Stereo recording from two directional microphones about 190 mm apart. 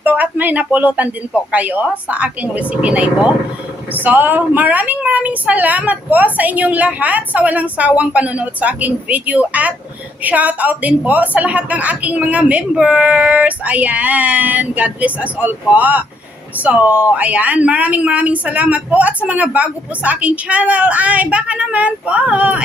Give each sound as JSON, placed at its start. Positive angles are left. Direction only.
{"t": 0.0, "sound": "a woman's voice", "side_deg": -10}